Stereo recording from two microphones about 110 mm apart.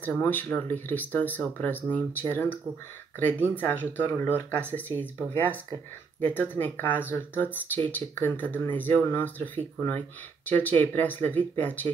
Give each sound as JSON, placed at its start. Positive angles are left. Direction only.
{"t": 0.0, "sound": "speech", "side_deg": 15}